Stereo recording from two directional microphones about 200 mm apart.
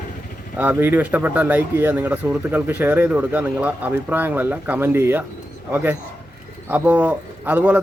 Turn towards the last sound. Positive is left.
turn(degrees=-10)  # may be behind; listen again after turning